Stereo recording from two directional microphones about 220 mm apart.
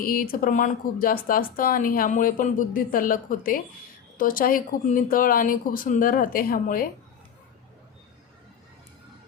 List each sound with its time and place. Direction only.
0.0 s speech: 40° left (ahead or behind)